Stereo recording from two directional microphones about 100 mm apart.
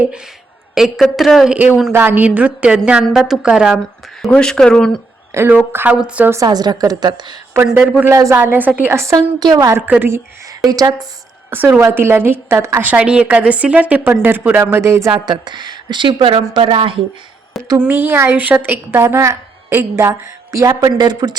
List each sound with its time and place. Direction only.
0.8 s a woman's voice: centre (ahead or behind)
1.5 s a woman's voice: 15° right (ahead or behind)
4.3 s speech: 5° left (ahead or behind)
5.3 s a woman's voice: 25° right (ahead or behind)
6.3 s a woman's voice: 40° right (ahead or behind)
7.5 s a woman's voice: 25° right (ahead or behind)
8.1 s speech: 30° right (ahead or behind)
8.4 s a woman's voice: 20° right (ahead or behind); by 9.7 s 40° right (ahead or behind)
9.7 s a woman's voice: 20° right (ahead or behind)
10.6 s speech: 40° right (ahead or behind)
11.5 s a woman's voice: 20° right (ahead or behind)
12.8 s a woman's voice: 15° right (ahead or behind)
15.3 s a woman's voice: 45° right (ahead or behind)
17.7 s a woman's voice: 20° right (ahead or behind); by 21.3 s 45° right (ahead or behind)